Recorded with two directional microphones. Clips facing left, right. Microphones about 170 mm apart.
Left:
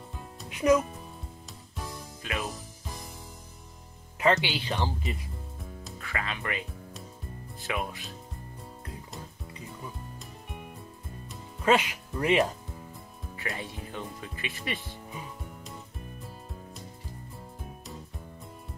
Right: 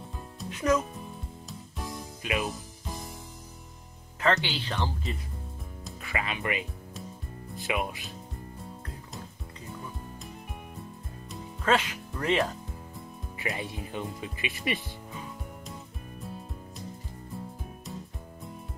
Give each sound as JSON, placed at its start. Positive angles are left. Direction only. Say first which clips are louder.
{"t": 0.5, "sound": "speech", "louder": "left 3 dB", "side_deg": 15}
{"t": 2.2, "sound": "speech", "louder": "right 4 dB", "side_deg": -15}
{"t": 4.2, "sound": "speech", "louder": "left 2 dB", "side_deg": 15}
{"t": 5.9, "sound": "speech", "louder": "right 2 dB", "side_deg": -15}
{"t": 7.6, "sound": "speech", "louder": "right 2 dB", "side_deg": -15}
{"t": 11.6, "sound": "speech", "louder": "left 2 dB", "side_deg": 15}
{"t": 13.4, "sound": "speech", "louder": "right 3 dB", "side_deg": -15}